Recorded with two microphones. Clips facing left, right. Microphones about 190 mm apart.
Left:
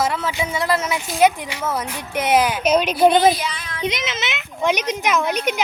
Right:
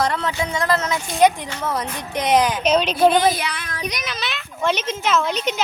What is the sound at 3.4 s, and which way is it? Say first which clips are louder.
Child singing: even; 60° right (ahead or behind).